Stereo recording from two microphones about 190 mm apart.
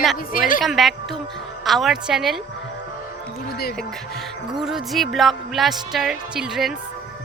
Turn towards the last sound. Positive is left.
turn(degrees=0)  # may be behind; listen again after turning